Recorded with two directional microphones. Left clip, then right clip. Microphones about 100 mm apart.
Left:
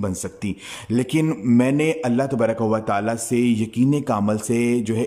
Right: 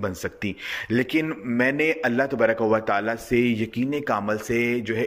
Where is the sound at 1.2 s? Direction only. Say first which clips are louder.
Left 7 dB; 50° left (ahead or behind).